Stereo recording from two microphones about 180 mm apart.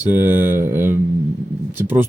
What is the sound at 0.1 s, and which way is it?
Mantra, 10° right (ahead or behind).